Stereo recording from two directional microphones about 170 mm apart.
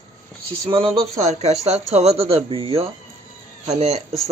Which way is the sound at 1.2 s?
40° right (ahead or behind).